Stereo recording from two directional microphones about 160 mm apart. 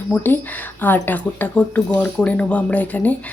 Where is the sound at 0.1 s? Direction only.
10° left (ahead or behind).